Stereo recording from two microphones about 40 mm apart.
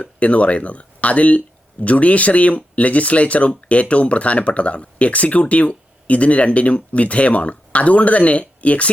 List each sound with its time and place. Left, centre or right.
0.0 s speech: left